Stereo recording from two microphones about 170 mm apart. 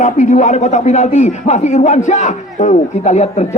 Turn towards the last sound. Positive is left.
turn(degrees=40)  # may be behind; listen again after turning